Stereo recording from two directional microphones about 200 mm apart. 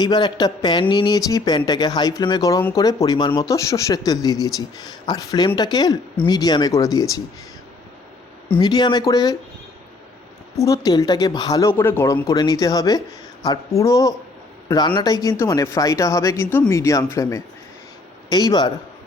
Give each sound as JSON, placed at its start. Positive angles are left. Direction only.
{"t": 0.0, "sound": "speech", "side_deg": 20}
{"t": 8.5, "sound": "speech", "side_deg": 20}
{"t": 10.6, "sound": "speech", "side_deg": 15}